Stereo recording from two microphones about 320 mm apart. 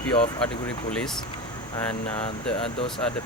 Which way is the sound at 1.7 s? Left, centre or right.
Centre.